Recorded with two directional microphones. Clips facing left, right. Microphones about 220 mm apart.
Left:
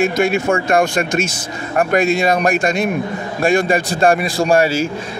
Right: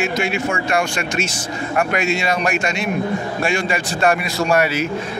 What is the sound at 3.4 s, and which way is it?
A man's voice, 35° left (ahead or behind).